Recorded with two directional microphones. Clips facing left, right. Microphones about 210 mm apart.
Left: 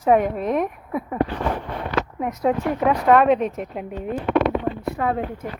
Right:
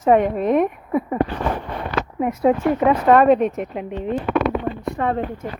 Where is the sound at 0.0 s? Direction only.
Centre (ahead or behind).